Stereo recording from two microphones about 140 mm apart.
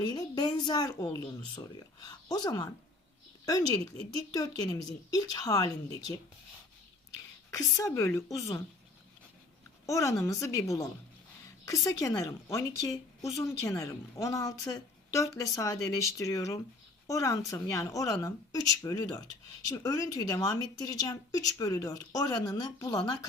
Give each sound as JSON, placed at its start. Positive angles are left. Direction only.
{"t": 0.1, "sound": "speech", "side_deg": 30}
{"t": 4.1, "sound": "speech", "side_deg": 25}
{"t": 7.5, "sound": "speech", "side_deg": 20}
{"t": 9.8, "sound": "speech", "side_deg": 20}